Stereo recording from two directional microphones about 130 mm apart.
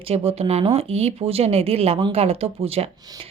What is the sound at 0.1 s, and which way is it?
A woman's voice, 50° right (ahead or behind).